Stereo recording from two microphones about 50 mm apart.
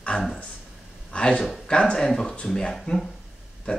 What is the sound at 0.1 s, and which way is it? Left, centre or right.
A man's voice, centre.